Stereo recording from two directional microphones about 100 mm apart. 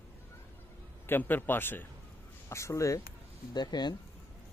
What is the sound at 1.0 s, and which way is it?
Speech, 20° left (ahead or behind).